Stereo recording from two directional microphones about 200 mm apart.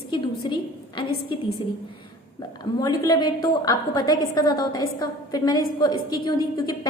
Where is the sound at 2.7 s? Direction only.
20° left (ahead or behind).